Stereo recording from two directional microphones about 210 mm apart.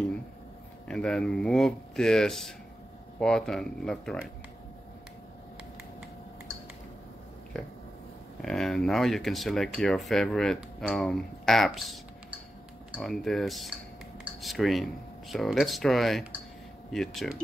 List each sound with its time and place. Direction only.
0.8 s speech: 5° left (ahead or behind)
8.4 s speech: centre (ahead or behind)